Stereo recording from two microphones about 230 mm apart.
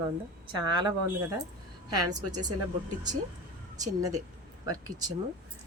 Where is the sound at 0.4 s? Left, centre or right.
Centre.